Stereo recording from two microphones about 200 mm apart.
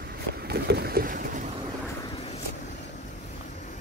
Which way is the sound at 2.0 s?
30° left (ahead or behind).